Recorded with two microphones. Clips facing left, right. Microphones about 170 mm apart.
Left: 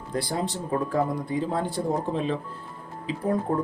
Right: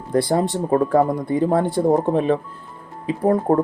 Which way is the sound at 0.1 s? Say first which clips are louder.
Right 10 dB; 60° right (ahead or behind).